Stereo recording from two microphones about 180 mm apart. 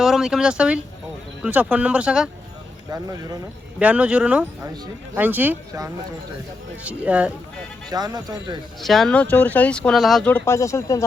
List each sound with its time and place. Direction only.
0.0 s speech: centre (ahead or behind)
2.9 s speech: 20° right (ahead or behind)
3.8 s speech: 5° right (ahead or behind)
7.9 s speech: 20° right (ahead or behind)
8.8 s speech: centre (ahead or behind); by 11.0 s 15° left (ahead or behind)